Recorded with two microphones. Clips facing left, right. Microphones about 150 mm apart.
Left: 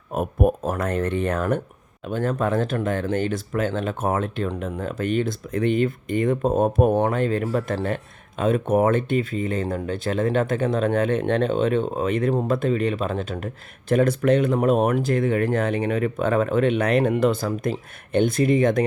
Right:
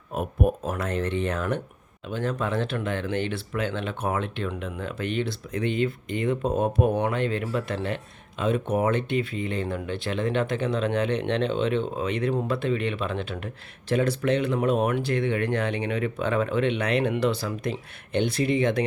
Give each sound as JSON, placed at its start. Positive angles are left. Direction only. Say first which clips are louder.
{"t": 0.1, "sound": "speech", "louder": "left 4 dB", "side_deg": 45}